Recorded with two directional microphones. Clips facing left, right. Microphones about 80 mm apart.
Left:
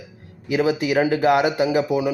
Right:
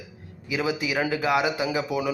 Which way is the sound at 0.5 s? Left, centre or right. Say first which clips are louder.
Left 7 dB; left.